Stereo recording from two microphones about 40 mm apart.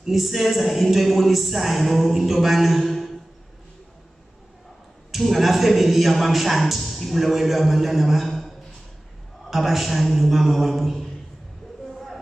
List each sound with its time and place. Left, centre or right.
0.0 s a man's voice: centre
5.1 s a man's voice: centre